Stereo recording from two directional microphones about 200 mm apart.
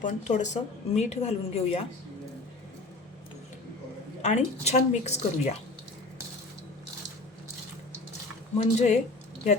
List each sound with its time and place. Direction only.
0.0 s a woman's voice: 35° left (ahead or behind)
4.2 s a woman's voice: 35° left (ahead or behind)
8.5 s a woman's voice: 35° left (ahead or behind)